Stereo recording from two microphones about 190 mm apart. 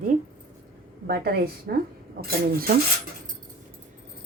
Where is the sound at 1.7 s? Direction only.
55° right (ahead or behind).